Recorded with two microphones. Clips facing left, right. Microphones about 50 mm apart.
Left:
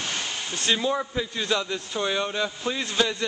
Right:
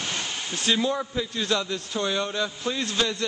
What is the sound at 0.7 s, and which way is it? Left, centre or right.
A man's voice, centre.